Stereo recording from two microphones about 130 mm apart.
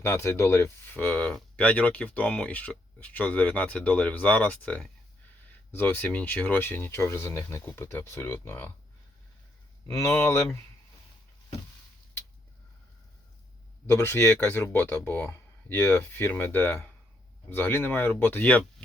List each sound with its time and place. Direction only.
0.0 s speech: 20° left (ahead or behind)
9.8 s speech: 20° left (ahead or behind)
13.8 s speech: 20° left (ahead or behind)